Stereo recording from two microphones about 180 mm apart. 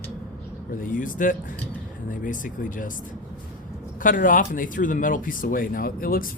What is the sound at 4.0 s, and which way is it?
Speech, 50° left (ahead or behind).